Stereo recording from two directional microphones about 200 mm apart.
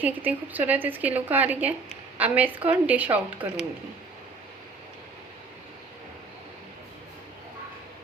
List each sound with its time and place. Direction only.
0.0 s a woman's voice: 10° right (ahead or behind)
3.4 s speech: 25° right (ahead or behind)